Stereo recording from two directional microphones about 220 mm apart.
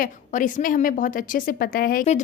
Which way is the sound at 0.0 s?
35° left (ahead or behind).